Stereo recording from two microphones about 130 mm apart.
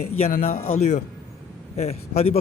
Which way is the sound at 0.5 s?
90° left.